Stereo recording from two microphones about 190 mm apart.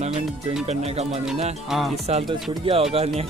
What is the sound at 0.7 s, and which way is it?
Speech, 35° right (ahead or behind).